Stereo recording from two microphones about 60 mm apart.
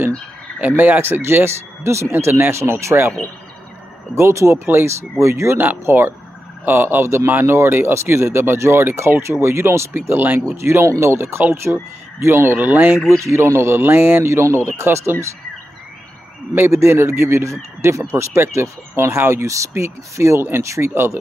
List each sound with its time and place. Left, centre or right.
0.6 s speech: right
4.6 s speech: right
5.6 s speech: right
10.4 s speech: right
13.1 s speech: right
16.5 s speech: right